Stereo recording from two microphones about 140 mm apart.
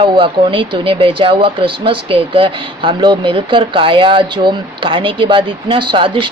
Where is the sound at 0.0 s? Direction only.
35° right (ahead or behind).